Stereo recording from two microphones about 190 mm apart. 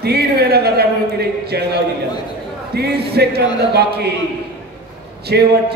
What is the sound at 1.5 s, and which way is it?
Music, 60° right (ahead or behind).